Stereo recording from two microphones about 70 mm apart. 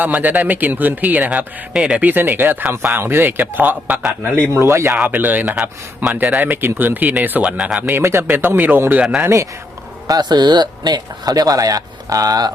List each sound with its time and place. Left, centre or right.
0.0 s speech: right
1.7 s speech: centre
2.0 s speech: right
4.5 s speech: right
5.0 s speech: right
7.4 s speech: centre
7.9 s speech: right
8.9 s speech: centre
9.2 s speech: right
10.1 s speech: right